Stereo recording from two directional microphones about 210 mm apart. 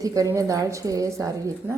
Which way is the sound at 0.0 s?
15° right (ahead or behind).